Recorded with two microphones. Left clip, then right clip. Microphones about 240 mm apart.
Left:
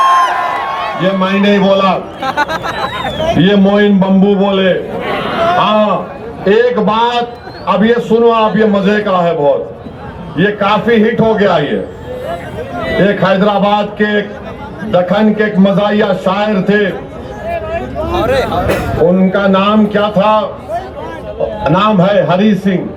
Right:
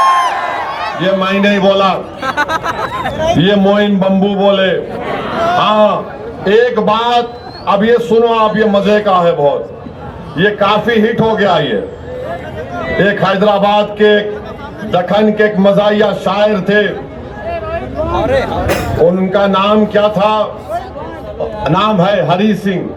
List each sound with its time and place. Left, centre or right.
0.0 s a sound: centre
0.8 s a man's voice: right
2.2 s speech: centre
3.4 s a man's voice: right
5.0 s chatter: left
5.5 s a man's voice: right
13.0 s a man's voice: right
18.1 s speech: left
19.3 s a man's voice: right
21.6 s a man's voice: right